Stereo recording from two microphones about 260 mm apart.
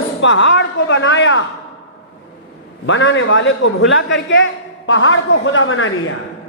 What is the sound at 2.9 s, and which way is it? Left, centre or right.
Speech, left.